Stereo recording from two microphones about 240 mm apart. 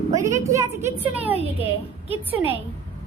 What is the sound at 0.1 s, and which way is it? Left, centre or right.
A woman's voice, centre.